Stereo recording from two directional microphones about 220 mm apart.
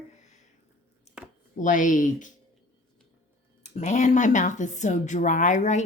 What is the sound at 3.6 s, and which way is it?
Speech, 30° left (ahead or behind).